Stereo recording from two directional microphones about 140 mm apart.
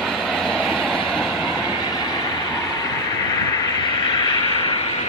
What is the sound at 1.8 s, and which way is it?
Vehicle, 30° left (ahead or behind).